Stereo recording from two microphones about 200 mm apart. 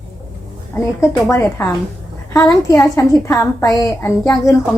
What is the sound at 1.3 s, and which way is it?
A woman's voice, 10° left (ahead or behind).